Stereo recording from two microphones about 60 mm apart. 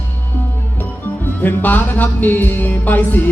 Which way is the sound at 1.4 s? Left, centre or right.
Left.